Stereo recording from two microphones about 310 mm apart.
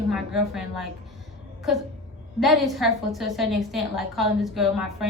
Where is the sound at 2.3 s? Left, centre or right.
Centre.